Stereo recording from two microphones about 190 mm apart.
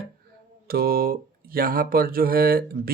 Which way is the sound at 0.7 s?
50° right (ahead or behind).